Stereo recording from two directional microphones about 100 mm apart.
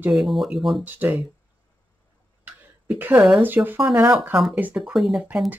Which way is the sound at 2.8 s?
20° right (ahead or behind).